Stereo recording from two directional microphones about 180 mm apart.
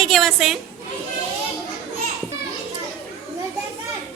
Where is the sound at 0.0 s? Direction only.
Centre (ahead or behind).